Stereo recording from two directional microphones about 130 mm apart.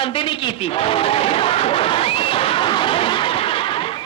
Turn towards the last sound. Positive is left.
turn(degrees=40)  # may be behind; listen again after turning